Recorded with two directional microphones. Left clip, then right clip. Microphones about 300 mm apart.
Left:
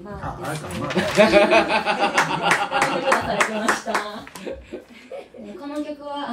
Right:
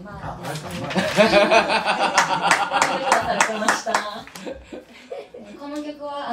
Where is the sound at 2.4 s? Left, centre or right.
Centre.